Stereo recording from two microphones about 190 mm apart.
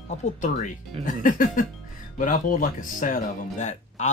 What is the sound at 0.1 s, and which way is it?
Speech, 40° left (ahead or behind).